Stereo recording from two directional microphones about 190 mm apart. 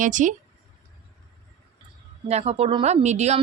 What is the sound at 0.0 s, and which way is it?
Speech, 40° right (ahead or behind).